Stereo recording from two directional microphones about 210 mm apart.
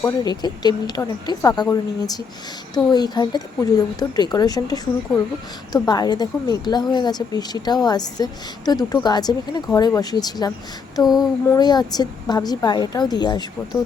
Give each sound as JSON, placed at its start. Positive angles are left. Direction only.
{"t": 0.0, "sound": "a woman's voice", "side_deg": 20}